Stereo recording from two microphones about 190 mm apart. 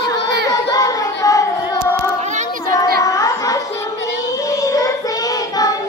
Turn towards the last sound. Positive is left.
turn(degrees=15)  # may be behind; listen again after turning